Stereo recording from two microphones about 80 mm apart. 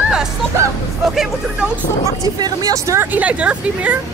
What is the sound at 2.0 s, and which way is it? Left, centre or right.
Speech, right.